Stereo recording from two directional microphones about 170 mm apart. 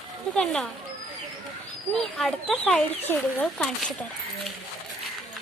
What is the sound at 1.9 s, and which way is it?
Speech, 5° left (ahead or behind).